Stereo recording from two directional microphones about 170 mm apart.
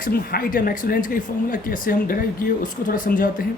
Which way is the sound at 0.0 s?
60° left (ahead or behind).